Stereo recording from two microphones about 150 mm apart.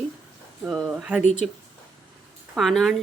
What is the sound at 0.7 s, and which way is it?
Speech, centre (ahead or behind).